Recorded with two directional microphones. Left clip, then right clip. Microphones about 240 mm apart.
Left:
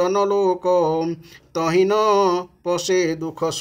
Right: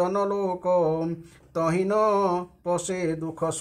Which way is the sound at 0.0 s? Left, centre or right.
Left.